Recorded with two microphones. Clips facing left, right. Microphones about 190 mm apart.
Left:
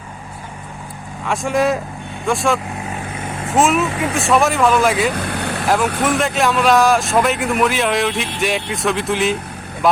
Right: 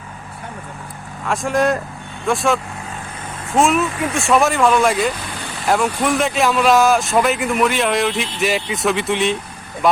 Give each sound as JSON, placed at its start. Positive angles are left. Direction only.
{"t": 1.2, "sound": "a man's voice", "side_deg": 0}
{"t": 3.6, "sound": "a man's voice", "side_deg": 0}
{"t": 5.1, "sound": "vehicle", "side_deg": 60}
{"t": 5.6, "sound": "a man's voice", "side_deg": 0}